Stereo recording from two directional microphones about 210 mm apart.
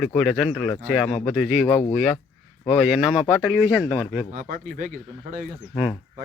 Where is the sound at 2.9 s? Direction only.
5° right (ahead or behind).